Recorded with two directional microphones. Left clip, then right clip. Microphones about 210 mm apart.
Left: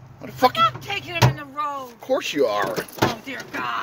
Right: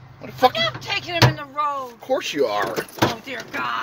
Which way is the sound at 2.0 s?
Centre (ahead or behind).